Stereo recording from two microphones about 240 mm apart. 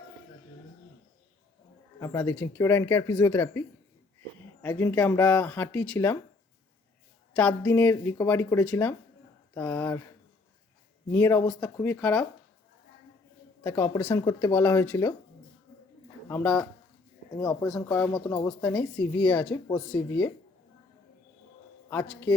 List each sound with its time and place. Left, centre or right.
2.0 s speech: centre
4.6 s speech: centre
7.3 s speech: centre
11.1 s speech: centre
13.7 s speech: centre
16.3 s speech: centre
18.1 s speech: centre
18.6 s speech: centre
19.6 s speech: centre
21.8 s speech: centre